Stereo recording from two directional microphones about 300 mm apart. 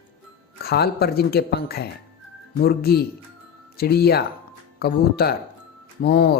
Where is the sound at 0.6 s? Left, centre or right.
Left.